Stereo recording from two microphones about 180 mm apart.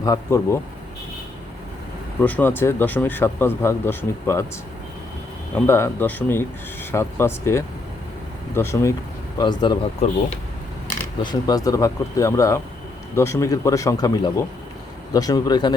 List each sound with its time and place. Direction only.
0.0 s speech: 20° left (ahead or behind)
2.2 s speech: 10° left (ahead or behind)
5.5 s speech: 15° left (ahead or behind)
11.2 s speech: 20° left (ahead or behind)